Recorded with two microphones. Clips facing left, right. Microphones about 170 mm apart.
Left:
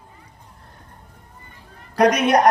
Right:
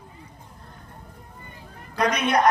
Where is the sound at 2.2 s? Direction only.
40° left (ahead or behind).